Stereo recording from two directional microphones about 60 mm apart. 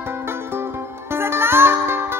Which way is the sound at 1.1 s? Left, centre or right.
Right.